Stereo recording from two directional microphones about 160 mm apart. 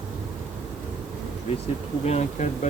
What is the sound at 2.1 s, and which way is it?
Speech, 45° left (ahead or behind).